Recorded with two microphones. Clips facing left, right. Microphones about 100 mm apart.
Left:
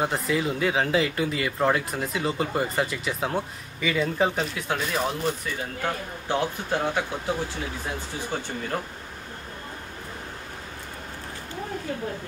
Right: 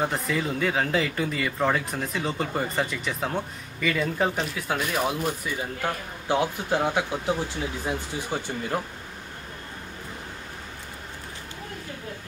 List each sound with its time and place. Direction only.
0.0 s speech: 5° left (ahead or behind); by 8.8 s 10° right (ahead or behind)